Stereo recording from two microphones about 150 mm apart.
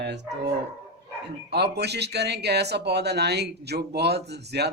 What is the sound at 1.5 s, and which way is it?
Speech, 90° right.